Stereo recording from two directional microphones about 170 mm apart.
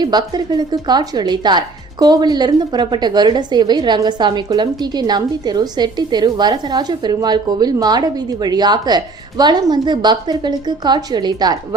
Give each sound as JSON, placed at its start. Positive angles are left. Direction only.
{"t": 0.0, "sound": "a woman's voice", "side_deg": -25}